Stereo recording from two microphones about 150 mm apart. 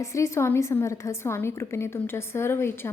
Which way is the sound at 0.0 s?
20° left (ahead or behind).